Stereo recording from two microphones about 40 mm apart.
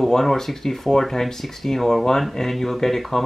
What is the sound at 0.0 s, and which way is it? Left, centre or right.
Speech, centre.